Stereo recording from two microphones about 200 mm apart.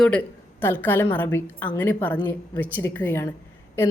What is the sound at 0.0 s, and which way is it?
Speech, 5° left (ahead or behind).